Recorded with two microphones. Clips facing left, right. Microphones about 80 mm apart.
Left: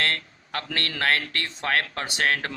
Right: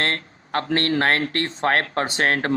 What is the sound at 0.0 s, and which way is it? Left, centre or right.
Speech, right.